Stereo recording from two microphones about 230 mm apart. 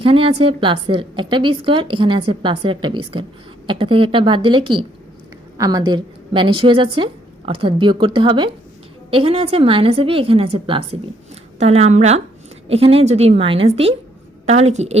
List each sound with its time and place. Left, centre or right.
0.0 s a woman's voice: right